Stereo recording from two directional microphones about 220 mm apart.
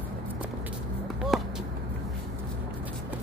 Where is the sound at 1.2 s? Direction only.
Centre (ahead or behind).